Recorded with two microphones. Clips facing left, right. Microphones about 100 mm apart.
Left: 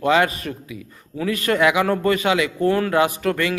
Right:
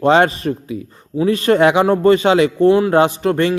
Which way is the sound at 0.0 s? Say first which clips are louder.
Right 5 dB; 35° right (ahead or behind).